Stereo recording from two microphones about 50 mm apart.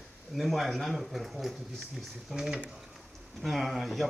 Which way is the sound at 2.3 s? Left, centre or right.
Centre.